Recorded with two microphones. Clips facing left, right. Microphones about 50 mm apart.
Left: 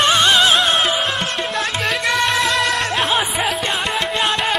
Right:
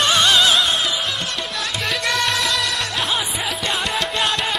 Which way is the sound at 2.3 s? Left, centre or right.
Left.